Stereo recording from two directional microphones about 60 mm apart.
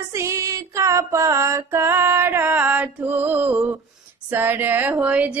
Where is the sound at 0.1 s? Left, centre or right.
Right.